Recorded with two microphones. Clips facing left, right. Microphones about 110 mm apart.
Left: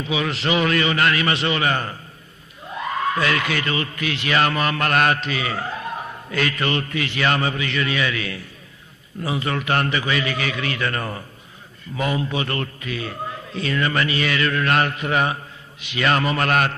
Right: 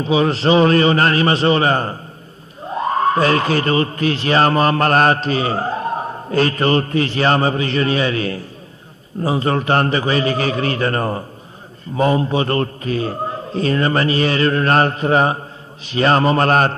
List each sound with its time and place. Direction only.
0.0 s speech: 35° right (ahead or behind)